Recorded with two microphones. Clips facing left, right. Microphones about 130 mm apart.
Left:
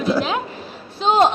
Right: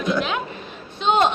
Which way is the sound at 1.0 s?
35° left (ahead or behind).